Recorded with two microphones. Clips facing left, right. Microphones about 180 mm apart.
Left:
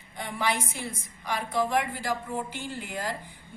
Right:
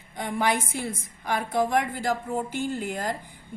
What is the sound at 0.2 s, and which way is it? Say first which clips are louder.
A woman's voice: right 4 dB; 50° right (ahead or behind).